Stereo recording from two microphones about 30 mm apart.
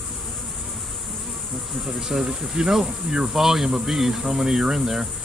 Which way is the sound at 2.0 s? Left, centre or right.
Centre.